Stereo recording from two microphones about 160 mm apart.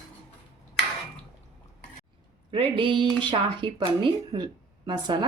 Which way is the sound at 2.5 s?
30° right (ahead or behind).